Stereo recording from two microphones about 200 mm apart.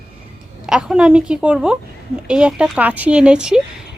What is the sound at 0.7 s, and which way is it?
A woman's voice, 5° right (ahead or behind).